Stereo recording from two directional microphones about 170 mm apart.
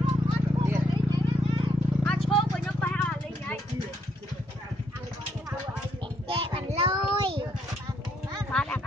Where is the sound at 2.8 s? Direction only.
10° left (ahead or behind).